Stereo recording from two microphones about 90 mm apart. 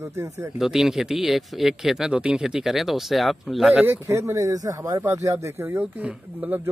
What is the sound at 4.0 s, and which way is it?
Speech, 35° right (ahead or behind).